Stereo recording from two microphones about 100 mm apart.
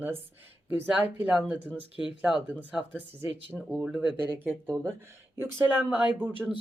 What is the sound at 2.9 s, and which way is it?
Speech, 20° right (ahead or behind).